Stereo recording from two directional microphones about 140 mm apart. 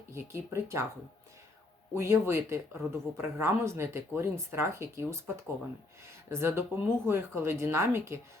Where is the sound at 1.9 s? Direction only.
20° right (ahead or behind).